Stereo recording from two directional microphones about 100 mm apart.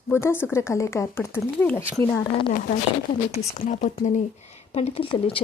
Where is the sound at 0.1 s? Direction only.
25° left (ahead or behind).